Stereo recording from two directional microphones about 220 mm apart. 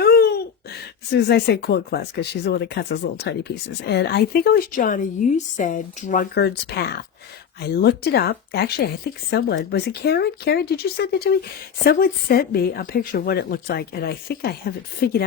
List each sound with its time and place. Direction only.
0.0 s speech: 45° left (ahead or behind)